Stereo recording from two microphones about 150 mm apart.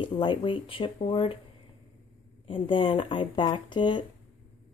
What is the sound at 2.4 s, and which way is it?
Speech, 35° left (ahead or behind).